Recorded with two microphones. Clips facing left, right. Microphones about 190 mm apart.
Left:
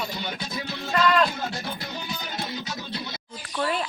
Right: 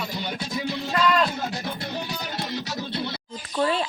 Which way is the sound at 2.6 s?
40° right (ahead or behind).